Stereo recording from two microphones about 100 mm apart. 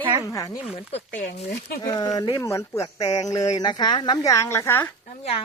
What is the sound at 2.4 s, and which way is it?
Speech, 25° left (ahead or behind).